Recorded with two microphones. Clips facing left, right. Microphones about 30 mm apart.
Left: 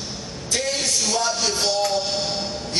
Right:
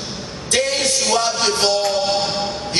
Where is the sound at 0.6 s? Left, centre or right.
Right.